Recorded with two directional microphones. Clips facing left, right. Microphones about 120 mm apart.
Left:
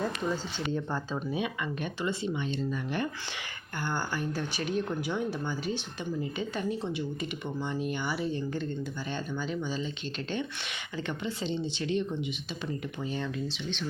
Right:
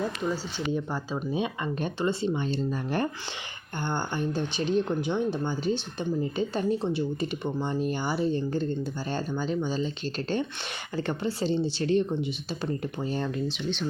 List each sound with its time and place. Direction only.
0.7 s speech: 10° right (ahead or behind)
1.3 s speech: 30° right (ahead or behind)
3.8 s speech: 25° right (ahead or behind); by 13.4 s 40° right (ahead or behind)